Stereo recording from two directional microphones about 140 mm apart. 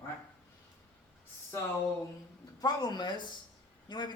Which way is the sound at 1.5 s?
20° left (ahead or behind).